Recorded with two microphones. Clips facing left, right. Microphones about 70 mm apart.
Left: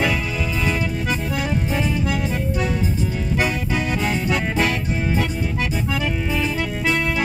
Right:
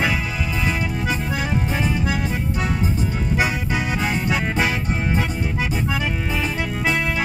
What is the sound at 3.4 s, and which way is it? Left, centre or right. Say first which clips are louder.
Music: left 1 dB; centre.